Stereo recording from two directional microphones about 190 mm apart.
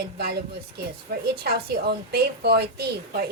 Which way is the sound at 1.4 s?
55° right (ahead or behind).